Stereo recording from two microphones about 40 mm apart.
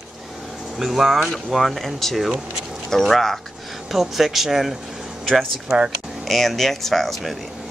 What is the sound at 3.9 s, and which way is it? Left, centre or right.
Speech, centre.